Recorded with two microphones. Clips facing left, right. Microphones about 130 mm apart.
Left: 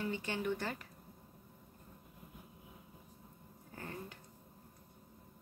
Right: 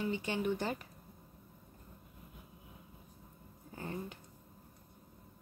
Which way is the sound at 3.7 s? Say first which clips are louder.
Right 4 dB; 20° right (ahead or behind).